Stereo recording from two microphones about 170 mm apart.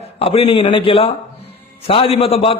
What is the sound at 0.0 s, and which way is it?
A man's voice, 35° left (ahead or behind).